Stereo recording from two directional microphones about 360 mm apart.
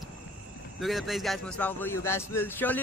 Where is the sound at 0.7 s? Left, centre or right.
Centre.